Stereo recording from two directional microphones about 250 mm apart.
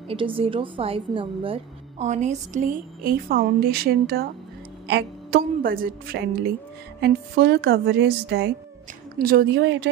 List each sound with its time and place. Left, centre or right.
0.1 s a woman's voice: right